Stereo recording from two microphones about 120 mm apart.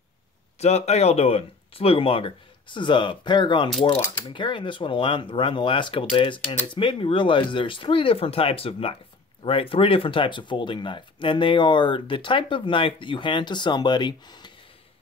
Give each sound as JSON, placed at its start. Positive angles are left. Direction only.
{"t": 0.6, "sound": "speech", "side_deg": 65}